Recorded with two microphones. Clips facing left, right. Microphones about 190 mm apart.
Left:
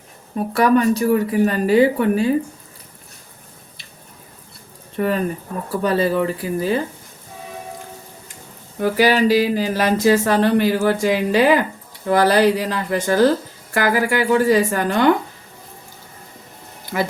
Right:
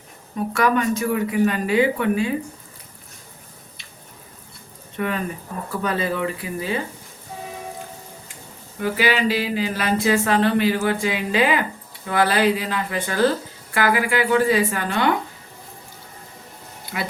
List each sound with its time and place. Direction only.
0.5 s speech: 35° left (ahead or behind)
4.9 s speech: 40° left (ahead or behind)
8.8 s speech: 40° left (ahead or behind)